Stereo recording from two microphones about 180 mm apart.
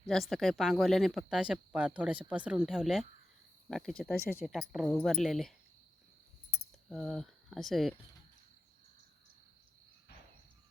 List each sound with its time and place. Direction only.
0.1 s speech: centre (ahead or behind)
6.8 s speech: centre (ahead or behind)